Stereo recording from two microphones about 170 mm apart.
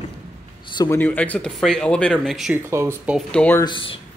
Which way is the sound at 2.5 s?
15° right (ahead or behind).